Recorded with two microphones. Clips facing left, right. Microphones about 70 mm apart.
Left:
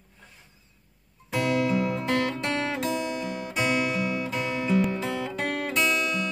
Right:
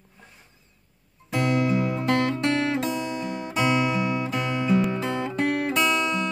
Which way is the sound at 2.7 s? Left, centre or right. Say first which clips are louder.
Right 2 dB; right.